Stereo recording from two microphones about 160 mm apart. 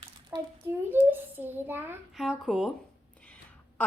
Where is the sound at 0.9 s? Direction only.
10° right (ahead or behind).